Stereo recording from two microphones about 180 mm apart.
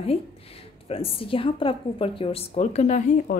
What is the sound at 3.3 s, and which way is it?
Speech, 55° left (ahead or behind).